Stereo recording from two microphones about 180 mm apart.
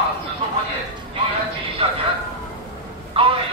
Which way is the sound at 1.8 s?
35° right (ahead or behind).